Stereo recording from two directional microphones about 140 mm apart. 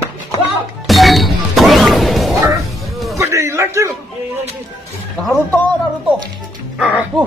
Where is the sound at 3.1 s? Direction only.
20° right (ahead or behind).